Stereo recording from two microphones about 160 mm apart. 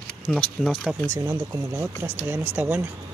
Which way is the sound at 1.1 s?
15° right (ahead or behind).